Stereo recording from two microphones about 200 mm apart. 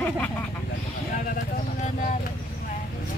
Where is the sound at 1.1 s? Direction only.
40° left (ahead or behind).